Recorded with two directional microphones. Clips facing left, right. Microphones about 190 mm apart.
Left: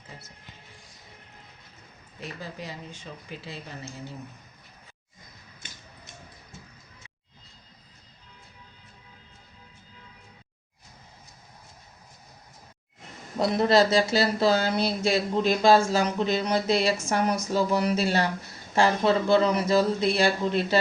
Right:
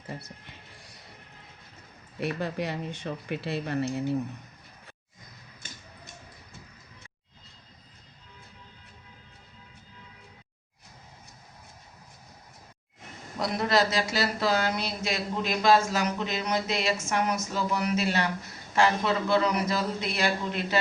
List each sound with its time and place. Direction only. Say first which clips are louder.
0.8 s music: right 2 dB; 65° right (ahead or behind)
2.2 s speech: right 8 dB; 65° right (ahead or behind)
13.4 s speech: left 5 dB; 30° left (ahead or behind)